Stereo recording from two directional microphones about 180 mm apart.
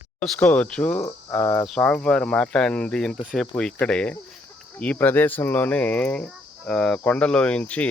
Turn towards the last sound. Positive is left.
turn(degrees=5)  # may be behind; listen again after turning